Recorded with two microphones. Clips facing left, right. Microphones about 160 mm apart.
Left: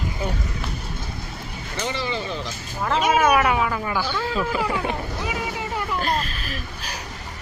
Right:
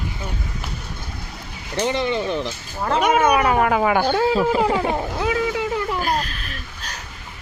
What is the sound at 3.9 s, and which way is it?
Speech, 50° right (ahead or behind).